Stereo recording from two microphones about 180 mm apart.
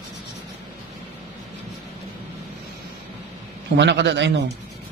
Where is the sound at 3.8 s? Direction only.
75° right (ahead or behind).